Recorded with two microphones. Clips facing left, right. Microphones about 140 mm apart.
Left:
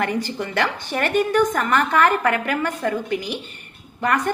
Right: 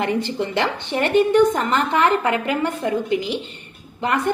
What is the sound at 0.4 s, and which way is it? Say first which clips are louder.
A woman's voice: right 1 dB; 20° right (ahead or behind).